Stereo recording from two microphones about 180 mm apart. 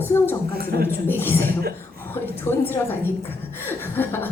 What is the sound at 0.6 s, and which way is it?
Speech, 55° right (ahead or behind).